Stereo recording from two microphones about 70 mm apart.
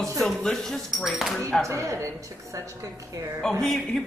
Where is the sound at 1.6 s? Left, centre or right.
Right.